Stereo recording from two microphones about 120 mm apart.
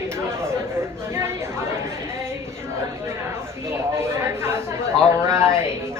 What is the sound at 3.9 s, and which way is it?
Speech, 20° right (ahead or behind).